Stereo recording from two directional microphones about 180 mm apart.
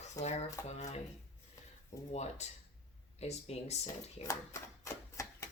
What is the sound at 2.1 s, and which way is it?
Speech, 35° left (ahead or behind).